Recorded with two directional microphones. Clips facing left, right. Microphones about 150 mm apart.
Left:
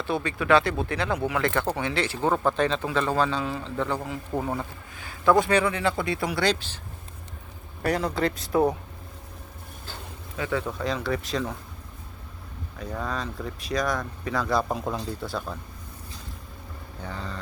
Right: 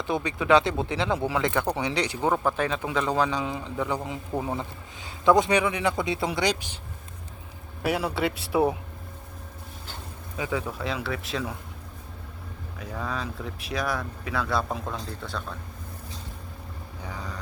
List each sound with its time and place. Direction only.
0.0 s speech: 20° right (ahead or behind)
4.5 s speech: 20° right (ahead or behind)
7.8 s speech: 5° right (ahead or behind)
10.3 s speech: 10° right (ahead or behind)
12.8 s speech: 5° right (ahead or behind)
17.0 s speech: 10° right (ahead or behind)